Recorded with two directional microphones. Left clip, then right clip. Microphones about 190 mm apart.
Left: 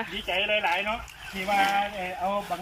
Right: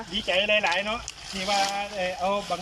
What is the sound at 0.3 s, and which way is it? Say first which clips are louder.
Speech: right 2 dB; 25° right (ahead or behind).